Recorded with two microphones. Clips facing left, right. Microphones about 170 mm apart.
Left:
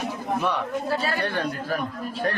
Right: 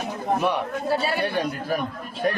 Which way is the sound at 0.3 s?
15° right (ahead or behind).